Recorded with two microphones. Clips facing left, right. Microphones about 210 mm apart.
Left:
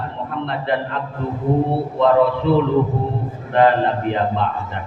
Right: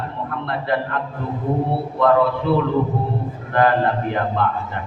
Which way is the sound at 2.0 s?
25° left (ahead or behind).